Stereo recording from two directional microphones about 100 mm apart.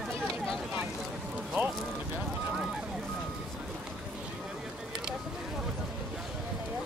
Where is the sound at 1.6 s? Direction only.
20° right (ahead or behind).